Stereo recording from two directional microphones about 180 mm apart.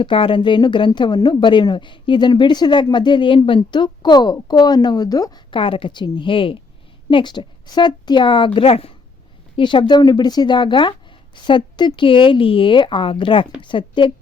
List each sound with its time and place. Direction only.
0.0 s speech: 30° left (ahead or behind)